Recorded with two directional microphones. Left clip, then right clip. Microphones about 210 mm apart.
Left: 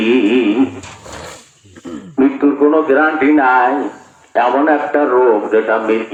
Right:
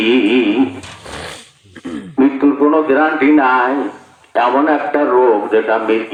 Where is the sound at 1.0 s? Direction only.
45° right (ahead or behind).